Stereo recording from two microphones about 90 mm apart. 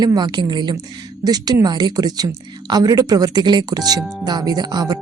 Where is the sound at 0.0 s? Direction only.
50° right (ahead or behind).